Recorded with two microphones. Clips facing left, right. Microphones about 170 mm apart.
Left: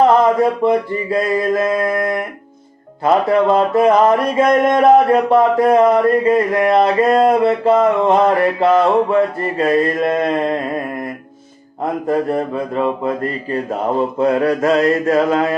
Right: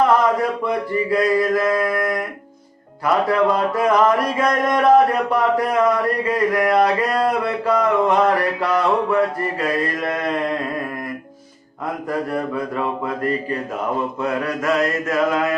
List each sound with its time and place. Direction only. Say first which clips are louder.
0.6 s speech: left 5 dB; 25° left (ahead or behind)
12.0 s speech: left 5 dB; 25° left (ahead or behind)
14.2 s mantra: left 8 dB; 30° left (ahead or behind)